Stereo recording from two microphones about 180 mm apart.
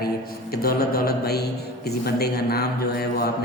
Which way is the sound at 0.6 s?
55° left (ahead or behind).